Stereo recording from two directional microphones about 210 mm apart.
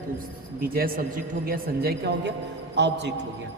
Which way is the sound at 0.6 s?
45° right (ahead or behind).